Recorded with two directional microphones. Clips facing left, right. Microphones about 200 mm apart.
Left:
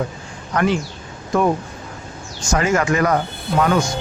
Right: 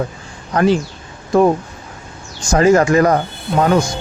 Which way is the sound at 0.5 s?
30° right (ahead or behind).